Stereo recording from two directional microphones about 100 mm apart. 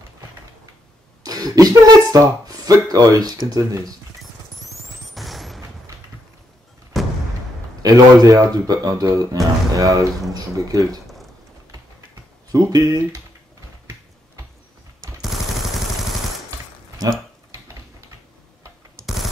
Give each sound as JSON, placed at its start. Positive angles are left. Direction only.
{"t": 1.2, "sound": "speech", "side_deg": -40}
{"t": 5.1, "sound": "vehicle", "side_deg": 0}
{"t": 6.9, "sound": "a sound", "side_deg": 0}
{"t": 7.8, "sound": "speech", "side_deg": -40}
{"t": 12.5, "sound": "speech", "side_deg": -35}